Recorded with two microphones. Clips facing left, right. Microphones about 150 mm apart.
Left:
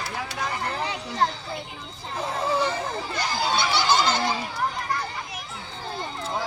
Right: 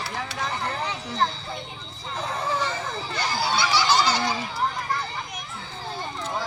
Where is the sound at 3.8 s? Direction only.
50° left (ahead or behind).